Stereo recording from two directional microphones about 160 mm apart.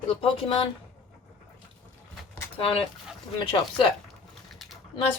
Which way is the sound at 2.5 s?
35° left (ahead or behind).